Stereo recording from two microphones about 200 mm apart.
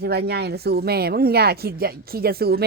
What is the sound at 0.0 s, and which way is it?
Speech, 55° right (ahead or behind).